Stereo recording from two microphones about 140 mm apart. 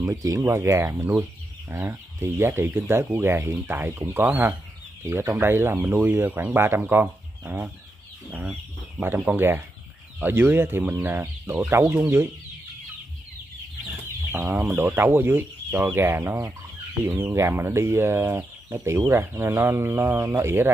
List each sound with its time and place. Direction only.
0.0 s speech: 25° right (ahead or behind)
14.3 s speech: 15° right (ahead or behind)